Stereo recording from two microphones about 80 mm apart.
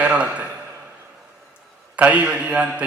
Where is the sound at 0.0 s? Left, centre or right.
Centre.